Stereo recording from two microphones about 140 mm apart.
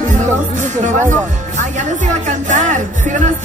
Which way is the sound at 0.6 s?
60° right (ahead or behind).